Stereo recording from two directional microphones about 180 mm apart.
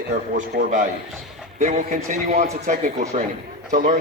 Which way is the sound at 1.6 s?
45° right (ahead or behind).